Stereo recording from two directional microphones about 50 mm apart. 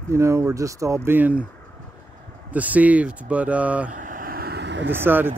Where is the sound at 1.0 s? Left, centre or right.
Right.